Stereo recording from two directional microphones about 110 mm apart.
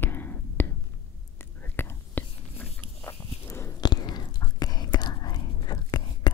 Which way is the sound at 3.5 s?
25° left (ahead or behind).